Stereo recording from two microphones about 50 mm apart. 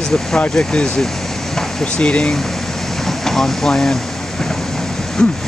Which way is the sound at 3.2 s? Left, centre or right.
Centre.